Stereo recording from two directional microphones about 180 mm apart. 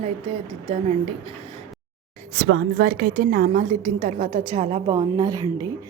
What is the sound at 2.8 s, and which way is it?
A woman's voice, 55° right (ahead or behind).